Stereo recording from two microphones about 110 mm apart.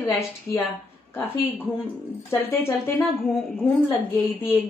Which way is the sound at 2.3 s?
20° left (ahead or behind).